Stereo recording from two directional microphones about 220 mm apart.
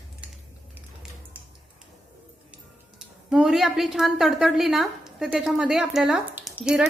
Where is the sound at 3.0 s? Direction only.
Centre (ahead or behind).